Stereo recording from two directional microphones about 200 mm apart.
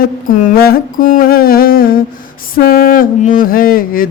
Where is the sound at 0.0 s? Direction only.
50° left (ahead or behind).